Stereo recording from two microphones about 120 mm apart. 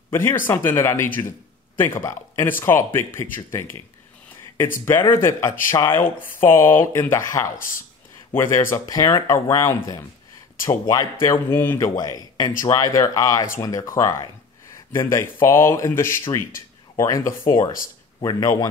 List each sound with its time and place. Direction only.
0.1 s speech: 20° left (ahead or behind)
11.9 s speech: 30° left (ahead or behind)